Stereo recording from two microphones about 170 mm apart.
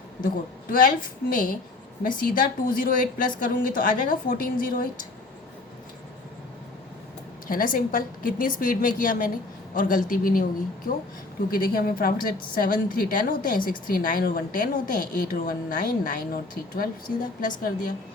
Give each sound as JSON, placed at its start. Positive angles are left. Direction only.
{"t": 0.7, "sound": "a woman's voice", "side_deg": 55}
{"t": 7.4, "sound": "a woman's voice", "side_deg": 55}
{"t": 11.5, "sound": "a woman's voice", "side_deg": 60}